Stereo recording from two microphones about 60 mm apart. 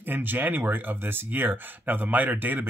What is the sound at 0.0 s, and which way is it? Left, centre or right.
Speech, right.